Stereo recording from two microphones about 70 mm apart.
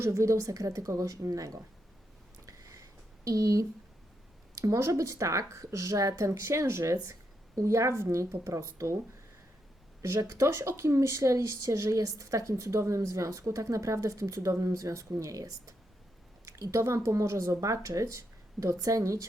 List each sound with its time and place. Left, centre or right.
0.0 s speech: right
2.5 s a sound: right
3.2 s speech: right
10.0 s speech: right